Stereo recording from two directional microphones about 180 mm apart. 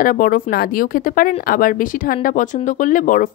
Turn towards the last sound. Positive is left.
turn(degrees=45)  # may be behind; listen again after turning